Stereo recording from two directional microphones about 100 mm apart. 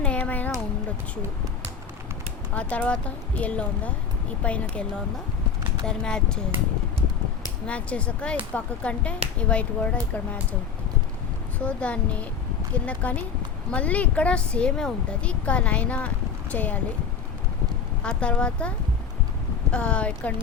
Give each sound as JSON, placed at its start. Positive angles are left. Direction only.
{"t": 0.0, "sound": "a sound", "side_deg": 15}
{"t": 2.6, "sound": "speech", "side_deg": 15}
{"t": 7.7, "sound": "speech", "side_deg": 15}
{"t": 11.6, "sound": "speech", "side_deg": 15}
{"t": 18.0, "sound": "speech", "side_deg": 10}
{"t": 19.7, "sound": "speech", "side_deg": 10}